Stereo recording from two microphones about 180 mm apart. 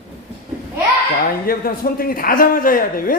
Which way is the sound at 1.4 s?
55° left (ahead or behind).